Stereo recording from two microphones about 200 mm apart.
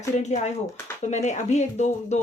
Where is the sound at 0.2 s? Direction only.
35° left (ahead or behind).